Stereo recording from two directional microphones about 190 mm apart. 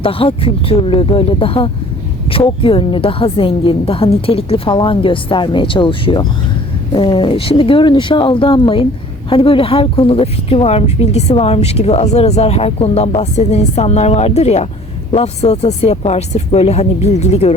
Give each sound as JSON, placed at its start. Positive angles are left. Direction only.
{"t": 0.0, "sound": "a woman's voice", "side_deg": 30}